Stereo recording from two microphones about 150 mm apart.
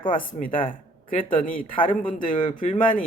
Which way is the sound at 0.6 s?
65° left (ahead or behind).